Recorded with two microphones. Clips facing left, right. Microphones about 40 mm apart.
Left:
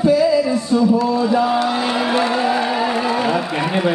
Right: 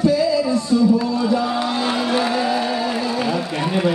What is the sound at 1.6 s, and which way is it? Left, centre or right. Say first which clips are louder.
Vehicle: left 2 dB; centre.